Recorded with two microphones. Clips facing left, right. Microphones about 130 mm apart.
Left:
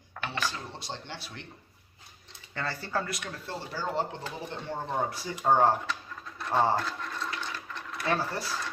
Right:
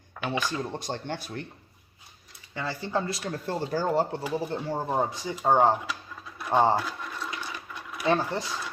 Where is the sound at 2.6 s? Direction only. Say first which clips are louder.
Right 3 dB; 15° right (ahead or behind); by 3.4 s 30° right (ahead or behind).